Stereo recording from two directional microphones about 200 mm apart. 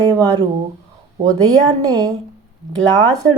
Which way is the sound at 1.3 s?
20° right (ahead or behind).